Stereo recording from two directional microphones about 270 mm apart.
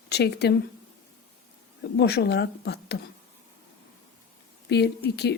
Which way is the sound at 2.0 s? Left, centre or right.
Left.